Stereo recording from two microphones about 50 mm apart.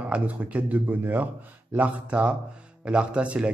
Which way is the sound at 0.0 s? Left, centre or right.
Right.